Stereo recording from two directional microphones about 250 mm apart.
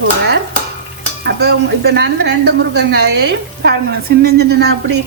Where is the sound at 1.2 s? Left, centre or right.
Right.